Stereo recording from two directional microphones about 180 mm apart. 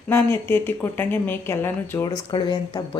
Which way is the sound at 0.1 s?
15° left (ahead or behind).